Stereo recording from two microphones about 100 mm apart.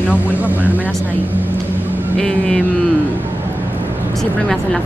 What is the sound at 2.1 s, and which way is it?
Vehicle, 10° left (ahead or behind).